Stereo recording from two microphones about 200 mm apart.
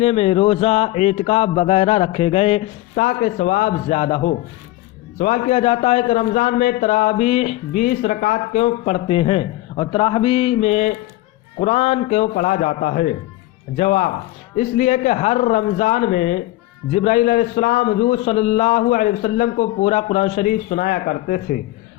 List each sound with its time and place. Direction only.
0.0 s a man's voice: 30° left (ahead or behind); by 21.6 s 45° left (ahead or behind)